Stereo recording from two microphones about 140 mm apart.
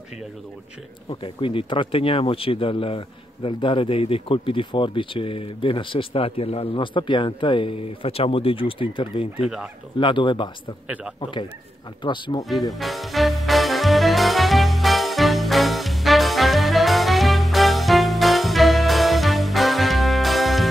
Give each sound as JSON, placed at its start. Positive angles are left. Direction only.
{"t": 1.0, "sound": "speech", "side_deg": 40}
{"t": 9.4, "sound": "speech", "side_deg": -5}
{"t": 9.9, "sound": "speech", "side_deg": 35}
{"t": 12.7, "sound": "music", "side_deg": 0}